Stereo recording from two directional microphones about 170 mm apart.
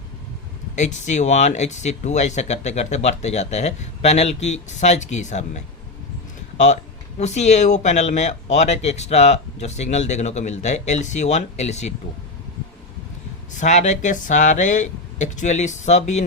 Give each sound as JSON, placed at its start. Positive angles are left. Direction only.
{"t": 0.8, "sound": "speech", "side_deg": 45}
{"t": 7.2, "sound": "speech", "side_deg": 40}
{"t": 13.5, "sound": "speech", "side_deg": 45}